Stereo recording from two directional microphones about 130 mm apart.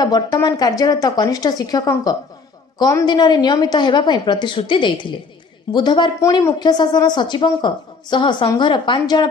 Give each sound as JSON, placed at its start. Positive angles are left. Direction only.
{"t": 0.0, "sound": "a woman's voice", "side_deg": 30}